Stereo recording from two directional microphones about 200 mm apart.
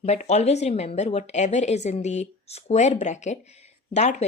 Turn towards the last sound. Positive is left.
turn(degrees=35)  # may be behind; listen again after turning